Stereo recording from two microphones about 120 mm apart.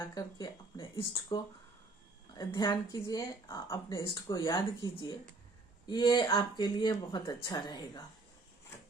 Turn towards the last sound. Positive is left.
turn(degrees=35)  # may be behind; listen again after turning